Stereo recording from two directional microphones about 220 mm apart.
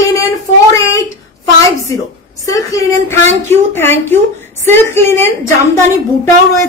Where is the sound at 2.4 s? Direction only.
15° left (ahead or behind).